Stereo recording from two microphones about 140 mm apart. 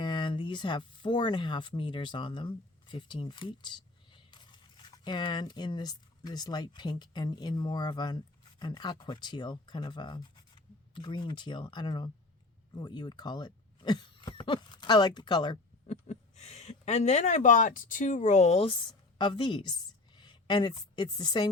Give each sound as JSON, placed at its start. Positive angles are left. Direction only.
{"t": 0.0, "sound": "speech", "side_deg": 35}
{"t": 15.9, "sound": "speech", "side_deg": 55}
{"t": 18.9, "sound": "a woman's voice", "side_deg": 35}